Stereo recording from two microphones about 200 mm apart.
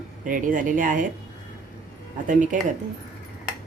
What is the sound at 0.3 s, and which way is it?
Speech, 45° right (ahead or behind).